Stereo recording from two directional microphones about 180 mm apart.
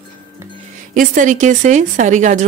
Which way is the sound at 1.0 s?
45° right (ahead or behind).